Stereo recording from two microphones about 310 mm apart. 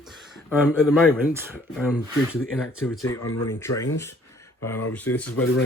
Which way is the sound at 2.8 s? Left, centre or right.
Centre.